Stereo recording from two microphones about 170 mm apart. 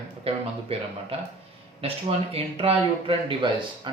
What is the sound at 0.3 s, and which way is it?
Speech, 35° right (ahead or behind).